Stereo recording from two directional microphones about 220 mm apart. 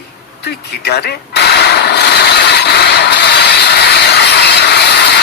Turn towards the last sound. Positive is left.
turn(degrees=50)  # may be behind; listen again after turning